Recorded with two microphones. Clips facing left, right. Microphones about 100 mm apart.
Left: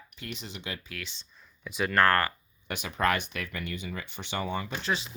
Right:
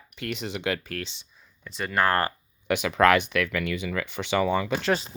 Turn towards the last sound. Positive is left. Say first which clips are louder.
# right 6 dB
turn(degrees=-40)  # may be behind; listen again after turning